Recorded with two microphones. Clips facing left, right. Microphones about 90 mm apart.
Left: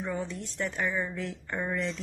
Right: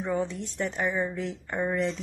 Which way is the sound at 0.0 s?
20° right (ahead or behind).